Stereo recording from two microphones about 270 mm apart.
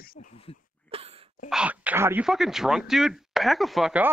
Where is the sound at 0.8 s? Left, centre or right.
Right.